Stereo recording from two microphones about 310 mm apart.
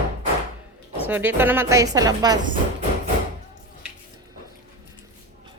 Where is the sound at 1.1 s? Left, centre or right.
Centre.